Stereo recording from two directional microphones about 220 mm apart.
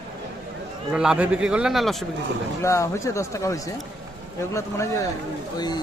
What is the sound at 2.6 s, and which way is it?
Speech, 15° left (ahead or behind).